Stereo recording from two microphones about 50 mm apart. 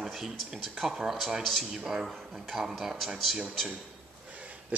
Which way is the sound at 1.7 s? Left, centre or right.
Centre.